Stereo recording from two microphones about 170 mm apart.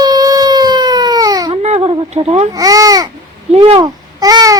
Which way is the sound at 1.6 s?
35° right (ahead or behind).